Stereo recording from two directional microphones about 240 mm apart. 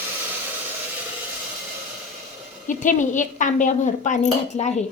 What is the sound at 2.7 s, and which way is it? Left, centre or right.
Speech, left.